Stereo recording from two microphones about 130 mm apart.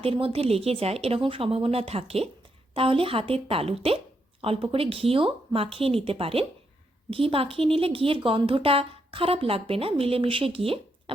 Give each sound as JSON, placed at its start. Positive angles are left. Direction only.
{"t": 0.0, "sound": "a woman's voice", "side_deg": -45}